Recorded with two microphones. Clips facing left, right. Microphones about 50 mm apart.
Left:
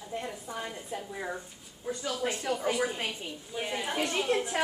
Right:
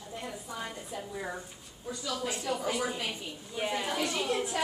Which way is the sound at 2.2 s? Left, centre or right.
Left.